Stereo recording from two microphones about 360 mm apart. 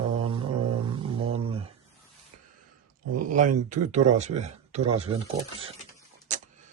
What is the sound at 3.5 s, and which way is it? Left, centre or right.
Speech, centre.